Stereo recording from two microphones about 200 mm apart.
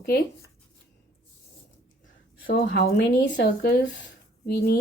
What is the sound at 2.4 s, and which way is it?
Speech, 50° left (ahead or behind).